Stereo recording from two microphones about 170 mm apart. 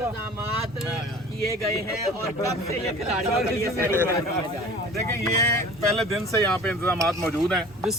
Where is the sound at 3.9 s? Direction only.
15° left (ahead or behind).